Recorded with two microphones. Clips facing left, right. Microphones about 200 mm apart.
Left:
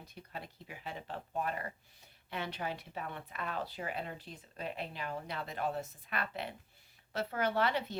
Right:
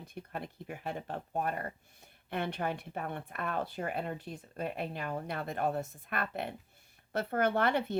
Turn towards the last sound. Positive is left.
turn(degrees=-55)  # may be behind; listen again after turning